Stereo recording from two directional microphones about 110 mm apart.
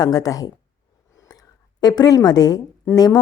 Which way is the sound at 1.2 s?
35° left (ahead or behind).